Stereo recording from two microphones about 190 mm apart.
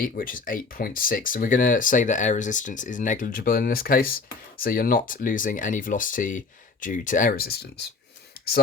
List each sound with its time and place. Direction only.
0.0 s speech: 50° left (ahead or behind)